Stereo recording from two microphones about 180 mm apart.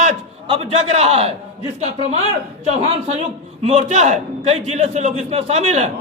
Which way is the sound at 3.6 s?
40° right (ahead or behind).